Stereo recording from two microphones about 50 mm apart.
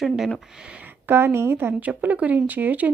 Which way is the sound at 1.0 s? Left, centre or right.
Right.